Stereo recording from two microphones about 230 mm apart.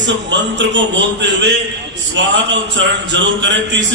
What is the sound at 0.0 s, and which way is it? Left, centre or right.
Speech, right.